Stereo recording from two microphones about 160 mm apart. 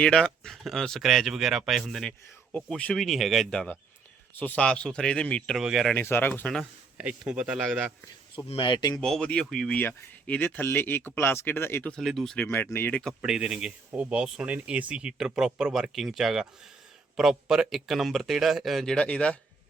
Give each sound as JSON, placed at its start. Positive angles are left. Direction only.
{"t": 0.0, "sound": "speech", "side_deg": 5}
{"t": 5.9, "sound": "speech", "side_deg": 15}
{"t": 6.9, "sound": "speech", "side_deg": -5}
{"t": 8.4, "sound": "speech", "side_deg": 35}
{"t": 9.0, "sound": "speech", "side_deg": 5}
{"t": 12.5, "sound": "speech", "side_deg": 15}